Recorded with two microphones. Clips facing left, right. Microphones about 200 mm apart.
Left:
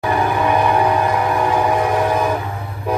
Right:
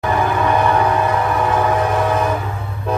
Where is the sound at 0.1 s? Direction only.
15° left (ahead or behind).